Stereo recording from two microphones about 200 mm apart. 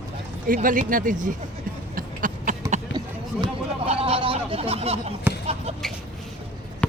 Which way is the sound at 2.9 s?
25° right (ahead or behind).